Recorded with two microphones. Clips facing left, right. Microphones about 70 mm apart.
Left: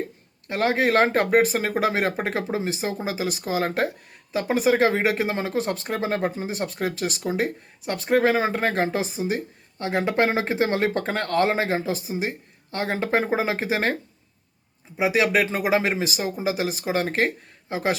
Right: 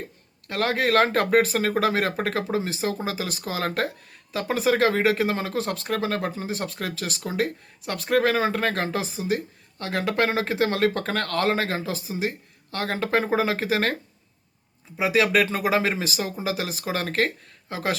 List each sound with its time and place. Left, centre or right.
0.4 s speech: centre